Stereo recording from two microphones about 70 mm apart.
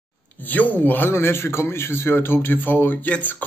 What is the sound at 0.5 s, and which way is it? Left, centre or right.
Speech, left.